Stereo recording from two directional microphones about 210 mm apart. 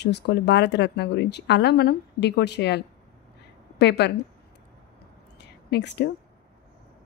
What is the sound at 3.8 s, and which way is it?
Speech, 55° left (ahead or behind).